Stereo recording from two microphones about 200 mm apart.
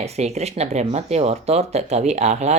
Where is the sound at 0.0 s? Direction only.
30° right (ahead or behind).